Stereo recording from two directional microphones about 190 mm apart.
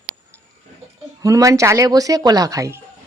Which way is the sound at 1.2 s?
15° right (ahead or behind).